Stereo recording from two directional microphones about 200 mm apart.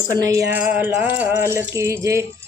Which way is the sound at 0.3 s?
15° right (ahead or behind).